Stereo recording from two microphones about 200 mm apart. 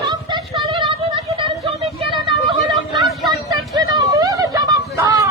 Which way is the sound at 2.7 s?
Centre (ahead or behind).